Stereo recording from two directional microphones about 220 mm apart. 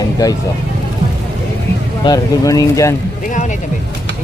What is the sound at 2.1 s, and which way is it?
Speech, 15° left (ahead or behind).